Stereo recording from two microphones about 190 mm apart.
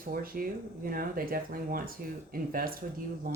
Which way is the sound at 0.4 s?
50° right (ahead or behind).